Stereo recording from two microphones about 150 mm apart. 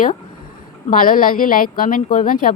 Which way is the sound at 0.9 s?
70° left (ahead or behind).